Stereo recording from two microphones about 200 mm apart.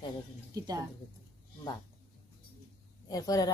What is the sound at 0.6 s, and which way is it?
Speech, 20° right (ahead or behind).